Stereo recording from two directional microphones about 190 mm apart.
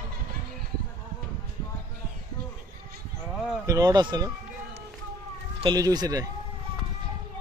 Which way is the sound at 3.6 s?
20° right (ahead or behind).